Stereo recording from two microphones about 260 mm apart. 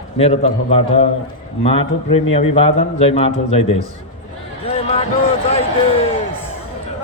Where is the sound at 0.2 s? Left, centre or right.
Left.